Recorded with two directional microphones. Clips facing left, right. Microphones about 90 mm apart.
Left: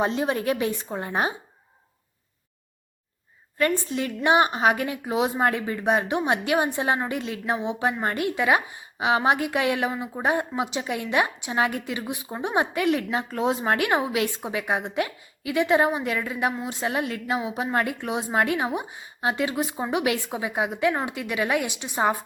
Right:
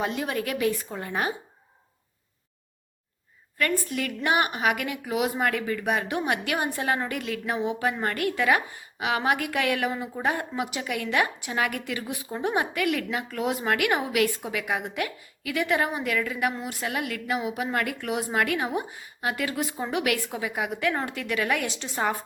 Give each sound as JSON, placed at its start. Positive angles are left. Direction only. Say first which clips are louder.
{"t": 0.0, "sound": "a woman's voice", "louder": "left 4 dB", "side_deg": 30}
{"t": 3.6, "sound": "a woman's voice", "louder": "left 3 dB", "side_deg": 25}